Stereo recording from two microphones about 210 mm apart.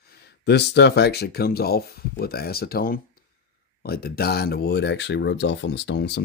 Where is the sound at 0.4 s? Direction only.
55° left (ahead or behind).